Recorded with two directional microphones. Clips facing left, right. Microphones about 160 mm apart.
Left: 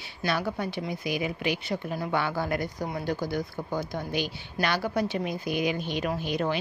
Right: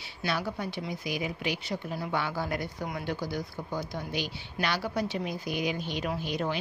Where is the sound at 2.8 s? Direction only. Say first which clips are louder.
Left 3 dB; 35° left (ahead or behind).